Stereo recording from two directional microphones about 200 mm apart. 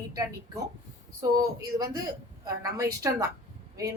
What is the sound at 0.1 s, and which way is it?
A woman's voice, 15° right (ahead or behind).